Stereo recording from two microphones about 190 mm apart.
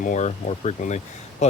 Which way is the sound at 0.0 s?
40° left (ahead or behind).